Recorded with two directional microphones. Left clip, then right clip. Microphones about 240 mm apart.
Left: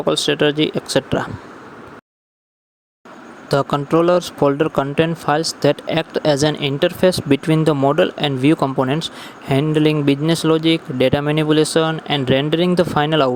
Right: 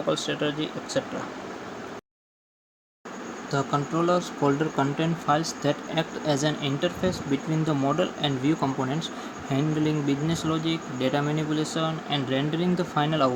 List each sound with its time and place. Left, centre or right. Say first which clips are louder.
0.0 s speech: left 10 dB; left
3.5 s speech: left 10 dB; left